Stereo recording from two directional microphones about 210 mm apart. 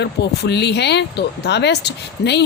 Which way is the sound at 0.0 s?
55° left (ahead or behind).